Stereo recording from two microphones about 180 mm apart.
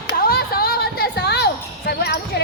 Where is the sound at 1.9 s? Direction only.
60° left (ahead or behind).